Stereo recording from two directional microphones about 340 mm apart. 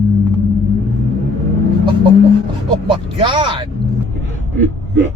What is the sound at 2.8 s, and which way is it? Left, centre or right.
Speech, centre.